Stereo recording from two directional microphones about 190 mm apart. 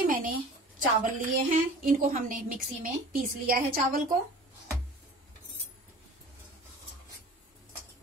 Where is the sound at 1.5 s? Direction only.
45° right (ahead or behind).